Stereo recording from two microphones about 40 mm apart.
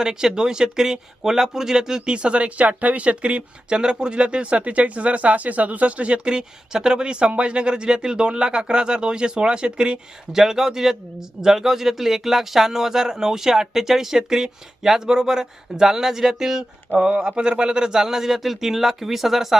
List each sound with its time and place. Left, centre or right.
0.0 s speech: centre
10.3 s a man's voice: centre
17.0 s a man's voice: right; by 19.5 s centre